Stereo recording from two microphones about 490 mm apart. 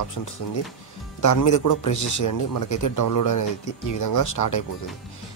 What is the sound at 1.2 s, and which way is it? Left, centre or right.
A man's voice, left.